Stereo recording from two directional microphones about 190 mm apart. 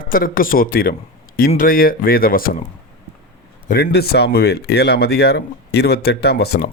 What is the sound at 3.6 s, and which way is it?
Speech, 55° left (ahead or behind).